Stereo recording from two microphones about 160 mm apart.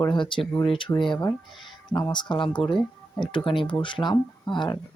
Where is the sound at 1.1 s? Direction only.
20° left (ahead or behind).